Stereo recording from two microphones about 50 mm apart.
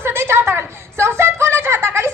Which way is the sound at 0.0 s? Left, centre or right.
Right.